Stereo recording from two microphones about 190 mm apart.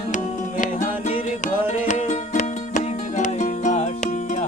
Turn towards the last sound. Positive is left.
turn(degrees=40)  # may be behind; listen again after turning